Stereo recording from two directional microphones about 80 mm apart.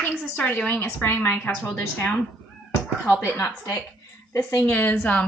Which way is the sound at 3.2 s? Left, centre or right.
Left.